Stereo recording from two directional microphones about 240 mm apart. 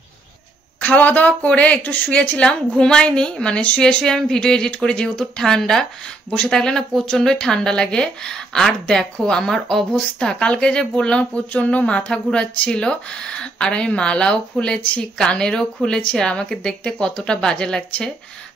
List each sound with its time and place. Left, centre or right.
0.7 s speech: centre